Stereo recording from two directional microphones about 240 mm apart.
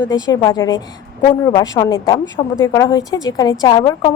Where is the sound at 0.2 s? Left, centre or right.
Centre.